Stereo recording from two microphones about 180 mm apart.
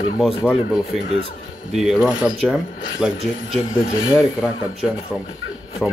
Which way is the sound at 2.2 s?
5° right (ahead or behind).